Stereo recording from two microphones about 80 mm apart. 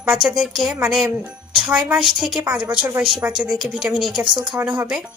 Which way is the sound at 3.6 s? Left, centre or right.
Centre.